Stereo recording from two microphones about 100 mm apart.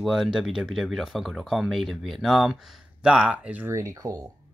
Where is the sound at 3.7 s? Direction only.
35° right (ahead or behind).